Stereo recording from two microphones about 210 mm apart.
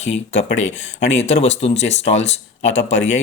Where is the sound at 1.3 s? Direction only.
30° left (ahead or behind).